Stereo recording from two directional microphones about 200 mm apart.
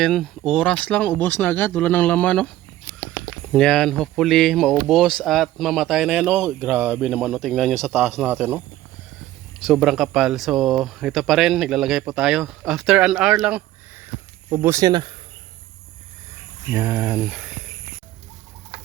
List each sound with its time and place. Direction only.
0.0 s speech: centre (ahead or behind)
9.6 s speech: centre (ahead or behind); by 15.1 s 20° right (ahead or behind)
16.7 s speech: 10° right (ahead or behind)